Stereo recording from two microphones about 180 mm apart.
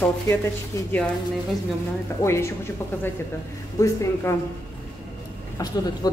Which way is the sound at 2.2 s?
15° left (ahead or behind).